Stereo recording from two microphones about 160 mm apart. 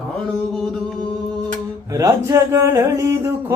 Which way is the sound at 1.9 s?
20° right (ahead or behind).